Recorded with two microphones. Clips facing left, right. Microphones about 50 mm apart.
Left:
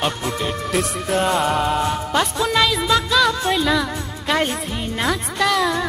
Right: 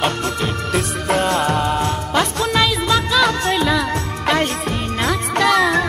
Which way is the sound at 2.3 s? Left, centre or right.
Centre.